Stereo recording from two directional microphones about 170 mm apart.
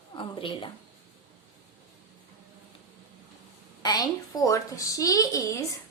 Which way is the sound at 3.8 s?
25° left (ahead or behind).